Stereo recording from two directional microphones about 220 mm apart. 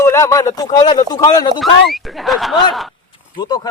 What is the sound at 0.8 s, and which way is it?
Speech, 30° left (ahead or behind).